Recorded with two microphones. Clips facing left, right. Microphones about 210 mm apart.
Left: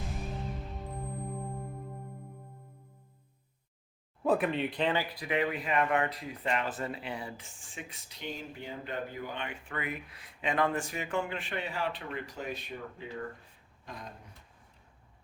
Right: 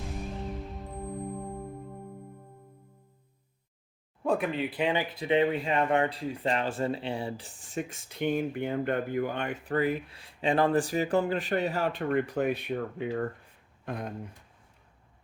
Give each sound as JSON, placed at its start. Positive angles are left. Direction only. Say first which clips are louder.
{"t": 0.7, "sound": "music", "louder": "right 3 dB", "side_deg": 0}
{"t": 4.2, "sound": "speech", "louder": "even", "side_deg": 0}